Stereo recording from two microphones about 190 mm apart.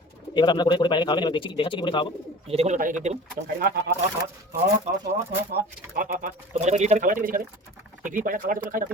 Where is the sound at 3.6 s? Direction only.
55° right (ahead or behind).